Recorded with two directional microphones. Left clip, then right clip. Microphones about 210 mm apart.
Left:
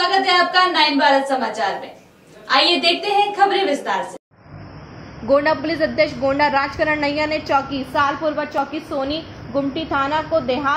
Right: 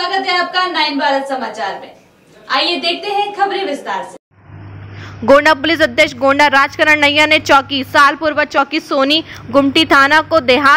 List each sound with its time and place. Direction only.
0.0 s a woman's voice: centre (ahead or behind)
5.3 s a woman's voice: 30° right (ahead or behind)